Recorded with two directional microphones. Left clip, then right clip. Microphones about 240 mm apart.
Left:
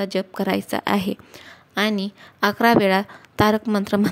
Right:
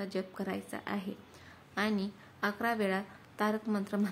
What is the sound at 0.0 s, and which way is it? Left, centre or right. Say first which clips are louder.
Speech: left 14 dB; left.